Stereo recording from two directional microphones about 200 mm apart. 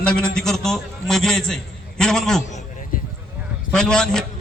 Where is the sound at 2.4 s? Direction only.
40° left (ahead or behind).